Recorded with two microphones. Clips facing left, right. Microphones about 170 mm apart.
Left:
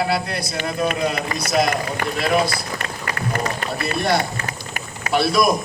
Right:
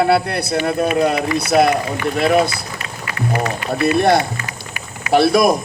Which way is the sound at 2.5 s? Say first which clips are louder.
Left 1 dB; 50° left (ahead or behind).